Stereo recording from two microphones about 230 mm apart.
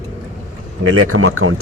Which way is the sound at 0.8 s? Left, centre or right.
Right.